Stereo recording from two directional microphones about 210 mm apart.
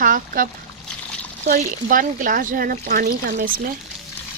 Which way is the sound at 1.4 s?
45° right (ahead or behind).